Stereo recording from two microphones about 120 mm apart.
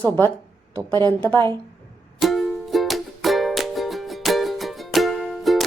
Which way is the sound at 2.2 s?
Centre (ahead or behind).